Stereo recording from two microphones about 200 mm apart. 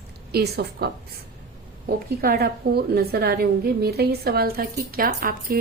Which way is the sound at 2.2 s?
50° right (ahead or behind).